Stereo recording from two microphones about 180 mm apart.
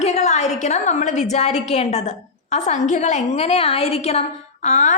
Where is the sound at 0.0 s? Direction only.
40° left (ahead or behind).